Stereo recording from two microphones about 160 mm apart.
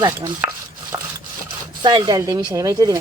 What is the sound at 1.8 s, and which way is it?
Speech, 25° right (ahead or behind).